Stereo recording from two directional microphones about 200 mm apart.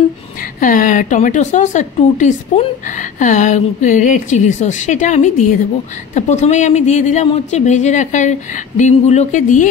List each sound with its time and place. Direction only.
0.4 s a woman's voice: 40° left (ahead or behind)